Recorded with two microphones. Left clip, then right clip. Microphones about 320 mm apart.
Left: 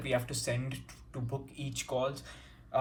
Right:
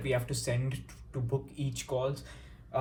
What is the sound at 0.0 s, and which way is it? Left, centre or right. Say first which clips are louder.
Speech: even; centre.